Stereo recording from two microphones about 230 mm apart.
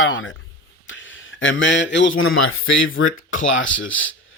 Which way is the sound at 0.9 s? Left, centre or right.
Left.